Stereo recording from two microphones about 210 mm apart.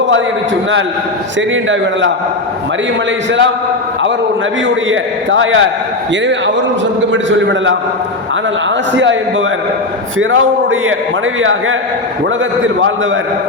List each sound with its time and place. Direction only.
1.4 s a man's voice: 60° right (ahead or behind)
4.6 s a man's voice: 65° right (ahead or behind)
9.0 s a man's voice: 60° right (ahead or behind)